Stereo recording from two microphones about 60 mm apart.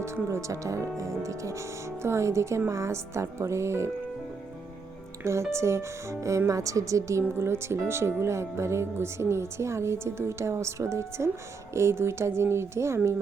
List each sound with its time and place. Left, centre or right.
0.0 s speech: right
5.2 s speech: right